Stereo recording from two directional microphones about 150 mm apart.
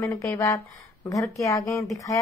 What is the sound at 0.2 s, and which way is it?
Speech, 20° left (ahead or behind).